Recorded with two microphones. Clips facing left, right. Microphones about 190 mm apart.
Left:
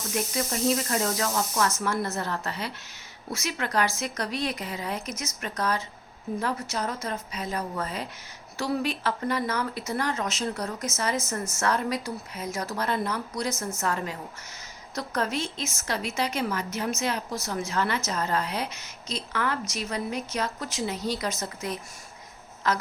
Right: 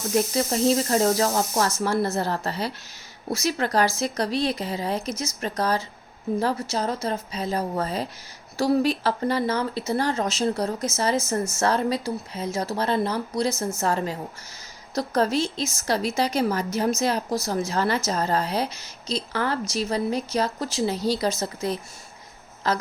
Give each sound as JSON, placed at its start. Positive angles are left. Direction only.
{"t": 0.1, "sound": "a woman's voice", "side_deg": -30}